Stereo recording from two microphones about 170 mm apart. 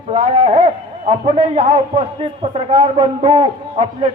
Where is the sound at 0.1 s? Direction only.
35° right (ahead or behind).